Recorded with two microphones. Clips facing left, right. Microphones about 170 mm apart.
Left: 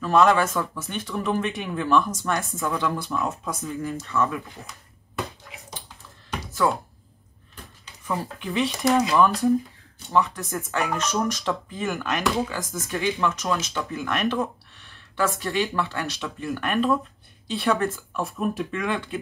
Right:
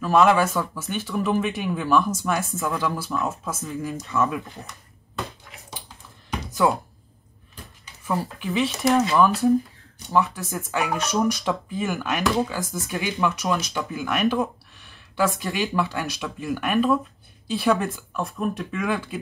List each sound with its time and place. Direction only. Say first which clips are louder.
0.0 s speech: right 1 dB; 5° right (ahead or behind)
3.9 s speech: right 2 dB; 15° right (ahead or behind)
8.1 s a woman's voice: right 2 dB; 5° right (ahead or behind)
17.7 s speech: left 2 dB; 15° right (ahead or behind)
18.1 s speech: even; centre (ahead or behind)